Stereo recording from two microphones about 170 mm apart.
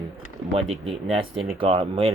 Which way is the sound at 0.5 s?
35° right (ahead or behind).